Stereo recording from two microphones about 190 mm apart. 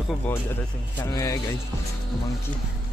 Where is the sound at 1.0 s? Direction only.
15° left (ahead or behind).